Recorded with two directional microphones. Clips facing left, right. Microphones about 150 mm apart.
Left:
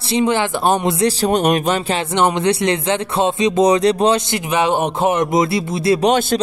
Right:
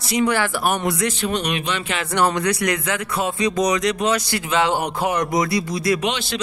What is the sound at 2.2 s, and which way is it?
Speech, 20° left (ahead or behind).